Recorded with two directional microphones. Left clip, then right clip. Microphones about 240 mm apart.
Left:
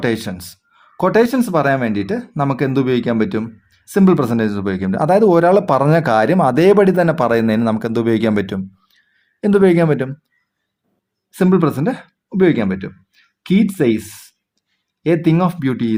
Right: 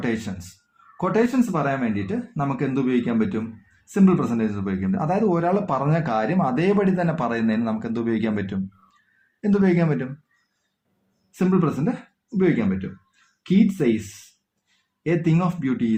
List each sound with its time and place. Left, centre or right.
0.9 s speech: left
11.3 s speech: left
15.0 s speech: left